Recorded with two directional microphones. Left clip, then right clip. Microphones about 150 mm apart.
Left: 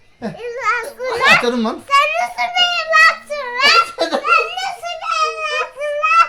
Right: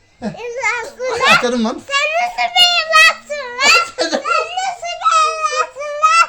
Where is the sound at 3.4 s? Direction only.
25° left (ahead or behind).